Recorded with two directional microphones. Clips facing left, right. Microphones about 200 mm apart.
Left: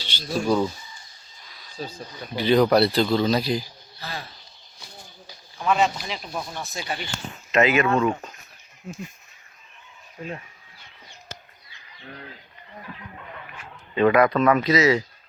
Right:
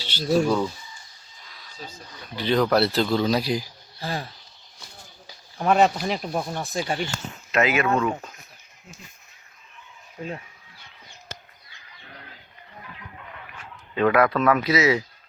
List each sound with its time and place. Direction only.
0.0 s a sound: 5° right (ahead or behind)
0.4 s speech: 10° left (ahead or behind)
1.8 s speech: 30° left (ahead or behind)
2.3 s speech: 5° left (ahead or behind)
5.5 s speech: 50° right (ahead or behind)
6.7 s speech: 35° right (ahead or behind)
7.5 s speech: 5° right (ahead or behind)
13.9 s speech: centre (ahead or behind)